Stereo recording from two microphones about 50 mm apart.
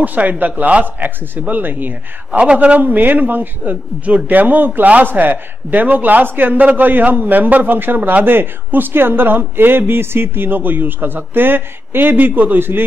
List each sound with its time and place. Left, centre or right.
0.0 s a man's voice: right
2.4 s a man's voice: right